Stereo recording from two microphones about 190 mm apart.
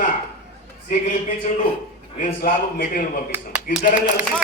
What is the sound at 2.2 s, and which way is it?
A man's voice, 45° left (ahead or behind).